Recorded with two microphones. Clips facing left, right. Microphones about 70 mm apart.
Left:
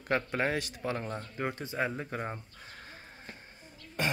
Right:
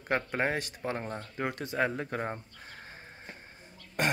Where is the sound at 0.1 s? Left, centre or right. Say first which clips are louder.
Even; right.